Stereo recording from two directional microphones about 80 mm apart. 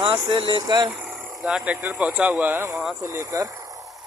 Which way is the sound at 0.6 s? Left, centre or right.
Right.